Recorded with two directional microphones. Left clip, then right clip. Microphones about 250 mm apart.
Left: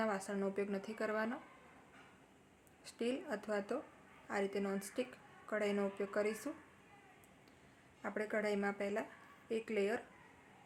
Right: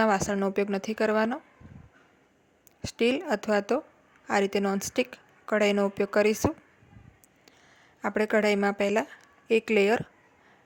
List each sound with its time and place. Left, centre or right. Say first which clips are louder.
0.0 s a woman's voice: right 14 dB; right
2.8 s a woman's voice: right 15 dB; right
8.0 s a woman's voice: right 14 dB; right